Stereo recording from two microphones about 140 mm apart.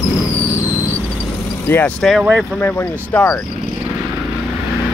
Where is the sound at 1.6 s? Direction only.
15° left (ahead or behind).